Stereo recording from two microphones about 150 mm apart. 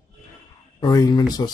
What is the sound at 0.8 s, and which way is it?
Speech, 30° left (ahead or behind).